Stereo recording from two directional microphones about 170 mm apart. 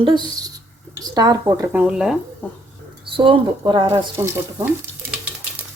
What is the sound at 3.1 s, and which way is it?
Speech, 30° right (ahead or behind).